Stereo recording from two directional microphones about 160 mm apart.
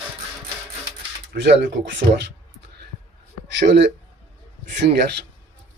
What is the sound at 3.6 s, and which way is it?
Speech, 90° right.